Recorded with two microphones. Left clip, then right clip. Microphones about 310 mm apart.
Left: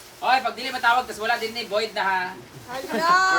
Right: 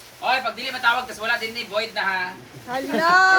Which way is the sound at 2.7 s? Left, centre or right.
Centre.